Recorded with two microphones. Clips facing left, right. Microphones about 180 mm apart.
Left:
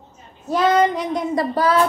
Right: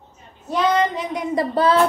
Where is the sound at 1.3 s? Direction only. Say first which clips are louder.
Right 2 dB; 25° right (ahead or behind).